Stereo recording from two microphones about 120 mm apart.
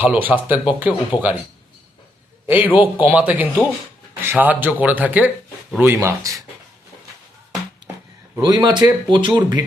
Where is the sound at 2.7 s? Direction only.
15° right (ahead or behind).